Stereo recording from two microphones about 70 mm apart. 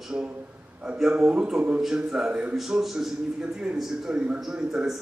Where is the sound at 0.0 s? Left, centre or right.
Centre.